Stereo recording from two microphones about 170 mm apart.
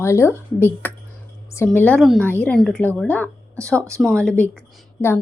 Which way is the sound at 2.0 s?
Centre (ahead or behind).